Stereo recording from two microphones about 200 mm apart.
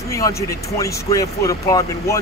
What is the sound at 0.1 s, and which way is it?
Speech, 15° left (ahead or behind).